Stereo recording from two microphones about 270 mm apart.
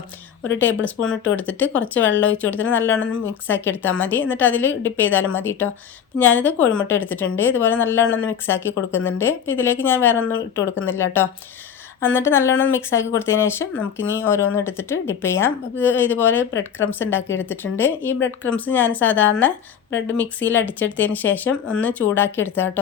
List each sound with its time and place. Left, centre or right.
0.6 s speech: centre
3.0 s speech: left
3.5 s speech: centre
10.2 s speech: left
10.8 s speech: centre